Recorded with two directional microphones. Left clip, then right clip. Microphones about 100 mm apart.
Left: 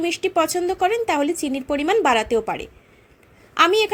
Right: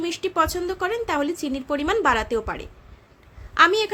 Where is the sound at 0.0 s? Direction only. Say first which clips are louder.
Left 2 dB; 30° left (ahead or behind).